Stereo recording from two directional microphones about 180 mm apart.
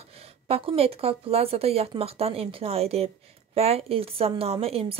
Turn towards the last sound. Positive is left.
turn(degrees=-30)  # may be behind; listen again after turning